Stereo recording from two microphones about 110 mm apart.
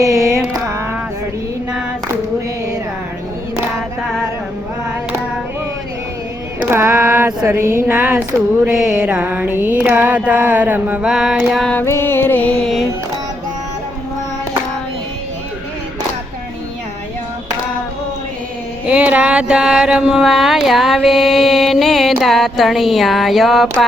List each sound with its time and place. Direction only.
0.0 s mantra: 30° right (ahead or behind)
6.6 s female singing: 20° right (ahead or behind)
7.4 s a sound: 25° right (ahead or behind)
8.7 s music: 5° right (ahead or behind)
11.7 s music: 20° left (ahead or behind)
18.9 s mantra: 10° right (ahead or behind)